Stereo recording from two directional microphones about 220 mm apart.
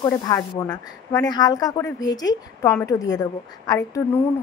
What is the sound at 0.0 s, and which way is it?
A woman's voice, 15° left (ahead or behind).